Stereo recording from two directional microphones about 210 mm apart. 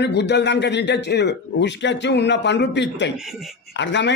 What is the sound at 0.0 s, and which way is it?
A man's voice, 55° left (ahead or behind).